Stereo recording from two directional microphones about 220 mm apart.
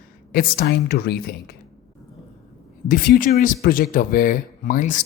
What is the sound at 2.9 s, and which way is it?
Speech, 35° left (ahead or behind).